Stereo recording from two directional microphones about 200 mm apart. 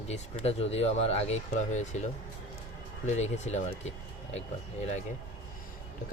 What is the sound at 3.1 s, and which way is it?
Speech, 35° left (ahead or behind).